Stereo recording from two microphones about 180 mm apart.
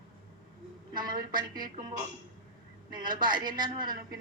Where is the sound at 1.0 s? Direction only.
25° right (ahead or behind).